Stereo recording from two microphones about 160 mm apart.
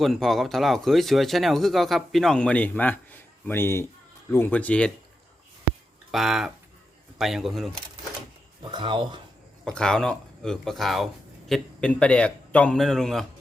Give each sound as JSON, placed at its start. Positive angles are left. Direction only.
{"t": 0.0, "sound": "speech", "side_deg": 0}
{"t": 6.1, "sound": "speech", "side_deg": 0}
{"t": 8.7, "sound": "speech", "side_deg": -30}
{"t": 9.6, "sound": "speech", "side_deg": 5}